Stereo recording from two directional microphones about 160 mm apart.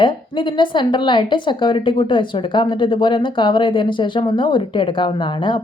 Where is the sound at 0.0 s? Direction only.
30° left (ahead or behind).